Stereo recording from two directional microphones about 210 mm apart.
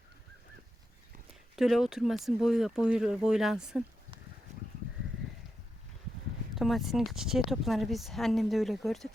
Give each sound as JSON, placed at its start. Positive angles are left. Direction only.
{"t": 1.5, "sound": "speech", "side_deg": 0}
{"t": 4.5, "sound": "sheep", "side_deg": -35}
{"t": 6.6, "sound": "speech", "side_deg": 0}